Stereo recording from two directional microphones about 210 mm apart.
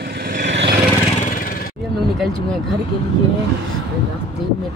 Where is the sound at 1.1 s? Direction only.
40° left (ahead or behind).